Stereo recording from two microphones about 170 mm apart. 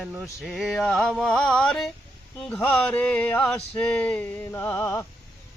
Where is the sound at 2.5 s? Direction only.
5° left (ahead or behind).